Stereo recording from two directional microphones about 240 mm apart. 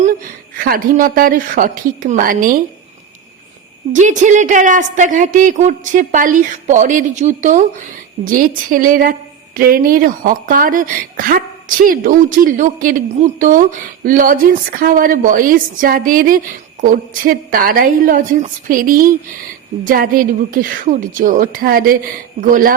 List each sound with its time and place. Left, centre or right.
0.5 s speech: right
3.9 s speech: right